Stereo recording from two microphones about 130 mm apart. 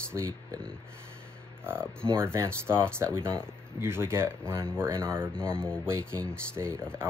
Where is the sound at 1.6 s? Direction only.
15° right (ahead or behind).